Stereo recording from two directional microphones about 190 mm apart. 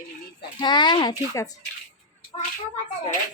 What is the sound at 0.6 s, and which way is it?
Speech, 25° left (ahead or behind).